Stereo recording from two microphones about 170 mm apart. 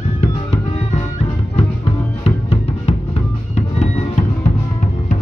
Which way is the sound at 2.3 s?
35° left (ahead or behind).